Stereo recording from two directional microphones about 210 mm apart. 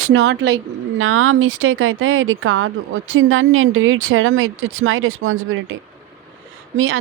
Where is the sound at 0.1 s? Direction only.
55° right (ahead or behind).